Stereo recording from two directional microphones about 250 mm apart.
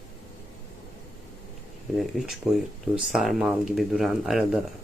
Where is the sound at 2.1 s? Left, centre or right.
Centre.